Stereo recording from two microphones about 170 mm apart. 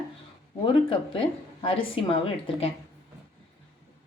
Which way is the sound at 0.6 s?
30° left (ahead or behind).